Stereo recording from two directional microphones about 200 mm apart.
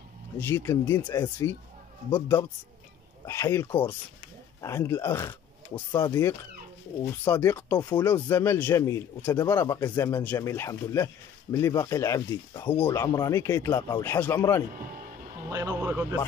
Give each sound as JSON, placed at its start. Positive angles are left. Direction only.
{"t": 0.4, "sound": "speech", "side_deg": 10}
{"t": 7.2, "sound": "speech", "side_deg": 10}
{"t": 15.5, "sound": "speech", "side_deg": -15}